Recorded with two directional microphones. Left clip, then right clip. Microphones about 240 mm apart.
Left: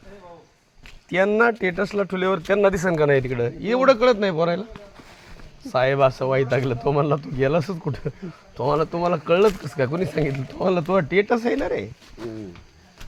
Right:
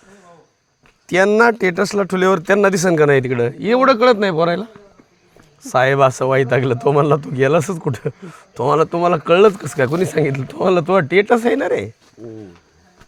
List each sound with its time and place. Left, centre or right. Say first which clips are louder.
1.0 s a man's voice: right 6 dB; right